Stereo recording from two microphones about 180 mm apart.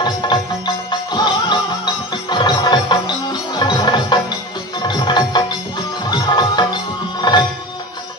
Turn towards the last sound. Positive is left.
turn(degrees=25)  # may be behind; listen again after turning